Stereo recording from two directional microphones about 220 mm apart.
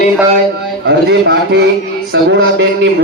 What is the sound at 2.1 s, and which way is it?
Music, 55° right (ahead or behind).